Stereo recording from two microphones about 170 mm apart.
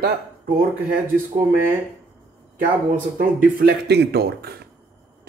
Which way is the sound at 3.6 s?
75° right (ahead or behind).